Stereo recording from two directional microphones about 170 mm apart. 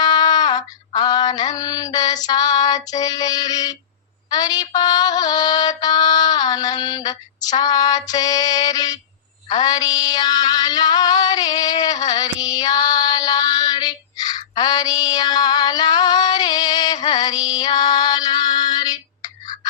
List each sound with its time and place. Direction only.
0.0 s female singing: 25° left (ahead or behind)
4.3 s music: 25° left (ahead or behind)
9.5 s mantra: 25° left (ahead or behind)